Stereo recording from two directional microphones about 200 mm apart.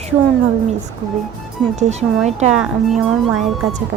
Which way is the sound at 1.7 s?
35° right (ahead or behind).